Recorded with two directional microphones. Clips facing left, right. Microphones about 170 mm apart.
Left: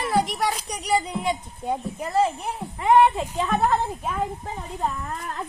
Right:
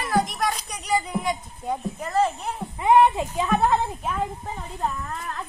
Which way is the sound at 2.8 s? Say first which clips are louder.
Even; 15° right (ahead or behind).